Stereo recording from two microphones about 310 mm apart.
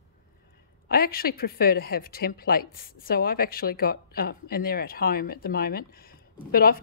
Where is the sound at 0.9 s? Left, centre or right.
Left.